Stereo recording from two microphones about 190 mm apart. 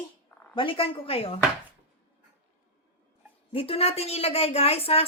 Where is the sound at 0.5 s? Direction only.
25° left (ahead or behind).